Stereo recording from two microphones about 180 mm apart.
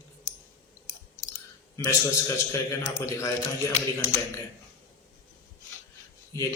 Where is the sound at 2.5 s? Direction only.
15° left (ahead or behind).